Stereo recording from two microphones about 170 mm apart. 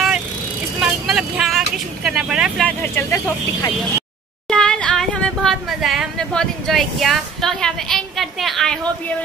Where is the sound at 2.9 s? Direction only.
15° left (ahead or behind).